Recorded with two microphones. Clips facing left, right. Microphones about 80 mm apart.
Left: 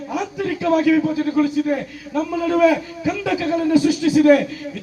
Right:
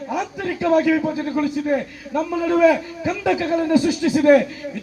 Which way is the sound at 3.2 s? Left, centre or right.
Right.